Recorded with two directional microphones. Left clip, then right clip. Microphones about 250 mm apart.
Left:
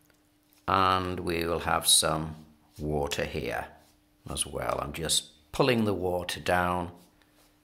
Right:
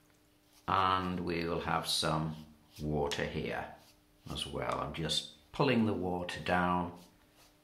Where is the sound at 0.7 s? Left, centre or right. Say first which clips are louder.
Left 5 dB; left.